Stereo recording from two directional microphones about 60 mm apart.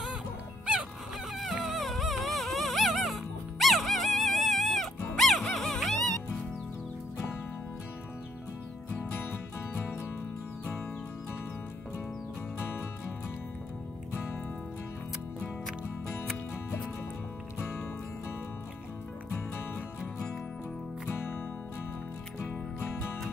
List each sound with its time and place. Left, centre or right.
1.3 s dog: centre
22.5 s music: left